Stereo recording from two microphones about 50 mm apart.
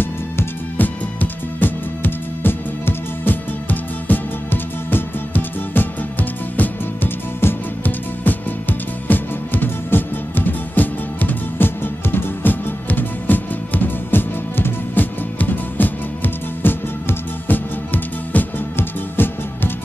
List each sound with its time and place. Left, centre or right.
0.7 s music: left